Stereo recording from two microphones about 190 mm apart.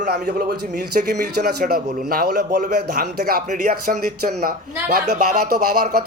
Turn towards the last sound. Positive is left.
turn(degrees=-55)  # may be behind; listen again after turning